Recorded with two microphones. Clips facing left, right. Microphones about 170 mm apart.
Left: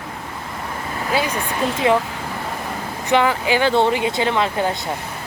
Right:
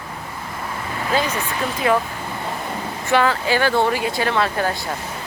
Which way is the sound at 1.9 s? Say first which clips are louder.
Left 1 dB; 20° left (ahead or behind).